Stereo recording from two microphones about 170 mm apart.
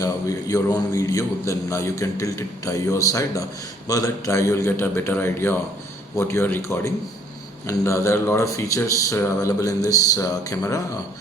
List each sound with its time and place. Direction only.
0.0 s a man's voice: 20° left (ahead or behind)